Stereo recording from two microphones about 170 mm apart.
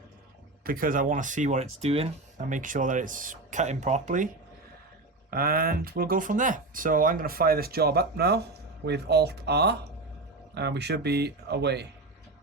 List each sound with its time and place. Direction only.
0.6 s speech: 55° right (ahead or behind)
5.3 s speech: 60° right (ahead or behind); by 11.9 s 80° right